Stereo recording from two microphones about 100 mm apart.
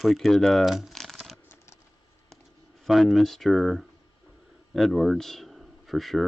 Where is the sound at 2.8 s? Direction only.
Centre (ahead or behind).